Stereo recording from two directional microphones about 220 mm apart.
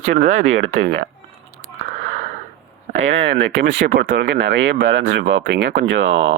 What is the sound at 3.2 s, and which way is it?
Speech, 55° right (ahead or behind).